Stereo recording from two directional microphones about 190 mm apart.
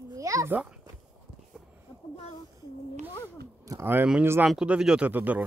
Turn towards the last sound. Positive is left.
turn(degrees=-10)  # may be behind; listen again after turning